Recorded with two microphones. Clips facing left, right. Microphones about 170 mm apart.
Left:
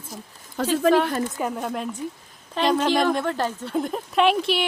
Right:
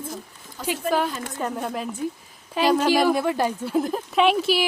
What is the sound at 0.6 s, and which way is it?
Speech, 70° left (ahead or behind).